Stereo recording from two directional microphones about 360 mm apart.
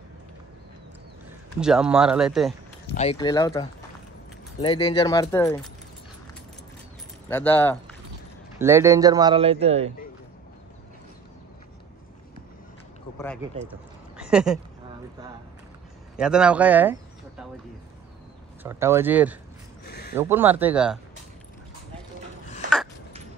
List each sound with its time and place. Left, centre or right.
1.6 s speech: centre
2.9 s speech: centre
7.2 s speech: centre
8.5 s a man's voice: centre
13.7 s a sound: centre
16.2 s speech: centre
18.6 s speech: centre
19.9 s a sound: left
20.2 s speech: centre